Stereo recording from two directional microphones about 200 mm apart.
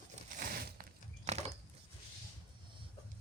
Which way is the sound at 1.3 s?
35° right (ahead or behind).